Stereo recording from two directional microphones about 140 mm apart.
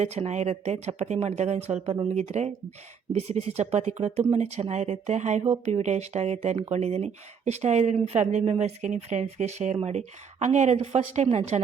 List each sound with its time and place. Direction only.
0.0 s speech: 55° right (ahead or behind)